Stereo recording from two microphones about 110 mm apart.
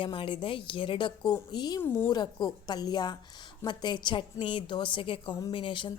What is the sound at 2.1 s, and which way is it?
A woman's voice, 40° left (ahead or behind).